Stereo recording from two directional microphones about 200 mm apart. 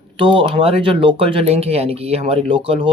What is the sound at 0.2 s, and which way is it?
Speech, 25° right (ahead or behind).